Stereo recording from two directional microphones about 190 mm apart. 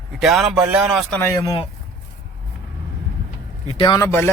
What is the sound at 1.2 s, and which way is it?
Speech, 15° left (ahead or behind).